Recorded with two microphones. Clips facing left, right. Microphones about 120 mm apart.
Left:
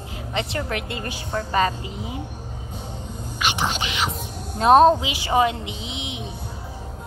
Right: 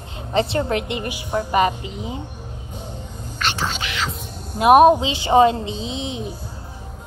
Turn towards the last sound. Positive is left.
turn(degrees=-35)  # may be behind; listen again after turning